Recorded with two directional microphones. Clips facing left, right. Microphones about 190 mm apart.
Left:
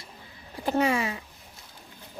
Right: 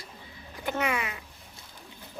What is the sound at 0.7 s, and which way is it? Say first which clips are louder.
Speech: left 5 dB; 30° left (ahead or behind).